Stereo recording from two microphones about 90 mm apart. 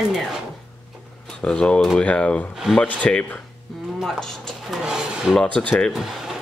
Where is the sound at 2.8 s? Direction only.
15° left (ahead or behind).